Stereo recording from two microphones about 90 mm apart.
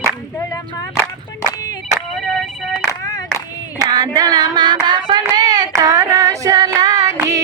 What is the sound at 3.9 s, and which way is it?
Child singing, 50° right (ahead or behind).